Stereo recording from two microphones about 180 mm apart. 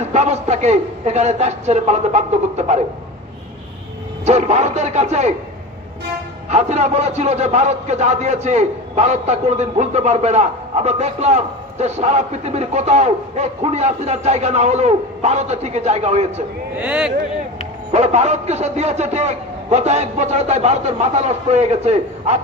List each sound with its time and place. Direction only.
0.1 s a man's voice: 40° right (ahead or behind)
4.3 s a man's voice: 35° right (ahead or behind)
6.5 s a man's voice: 40° right (ahead or behind)
16.7 s music: 5° right (ahead or behind)
17.9 s a man's voice: 35° right (ahead or behind)